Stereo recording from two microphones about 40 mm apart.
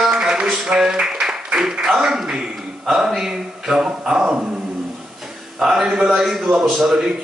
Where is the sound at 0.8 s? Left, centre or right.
Centre.